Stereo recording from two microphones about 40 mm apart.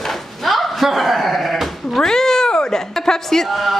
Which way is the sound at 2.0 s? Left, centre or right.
Centre.